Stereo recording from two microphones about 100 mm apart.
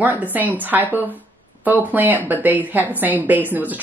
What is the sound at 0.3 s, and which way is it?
A woman's voice, 15° right (ahead or behind).